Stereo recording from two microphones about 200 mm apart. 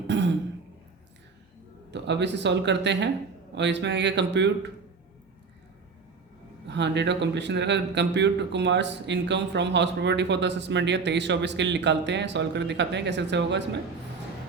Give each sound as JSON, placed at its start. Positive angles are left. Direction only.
{"t": 0.1, "sound": "throat clearing", "side_deg": -60}
{"t": 1.9, "sound": "speech", "side_deg": -60}
{"t": 6.7, "sound": "speech", "side_deg": -60}